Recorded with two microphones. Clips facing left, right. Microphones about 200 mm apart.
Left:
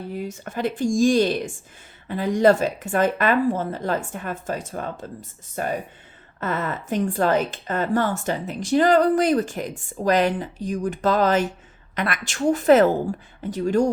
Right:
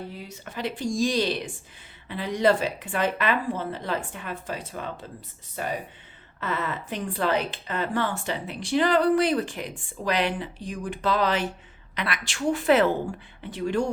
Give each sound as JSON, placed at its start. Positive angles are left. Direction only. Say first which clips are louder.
{"t": 0.3, "sound": "a woman's voice", "louder": "left 5 dB", "side_deg": 50}